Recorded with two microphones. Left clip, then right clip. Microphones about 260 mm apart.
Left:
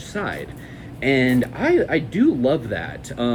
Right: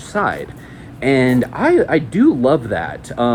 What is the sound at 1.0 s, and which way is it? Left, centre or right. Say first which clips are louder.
Speech: right 4 dB; right.